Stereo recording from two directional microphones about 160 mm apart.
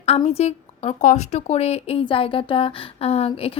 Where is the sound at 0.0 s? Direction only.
35° left (ahead or behind).